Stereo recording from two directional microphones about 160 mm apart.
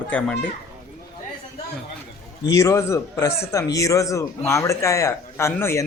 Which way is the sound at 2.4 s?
20° left (ahead or behind).